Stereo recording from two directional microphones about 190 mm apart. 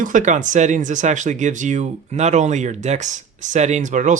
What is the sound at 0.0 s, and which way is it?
Speech, 40° right (ahead or behind).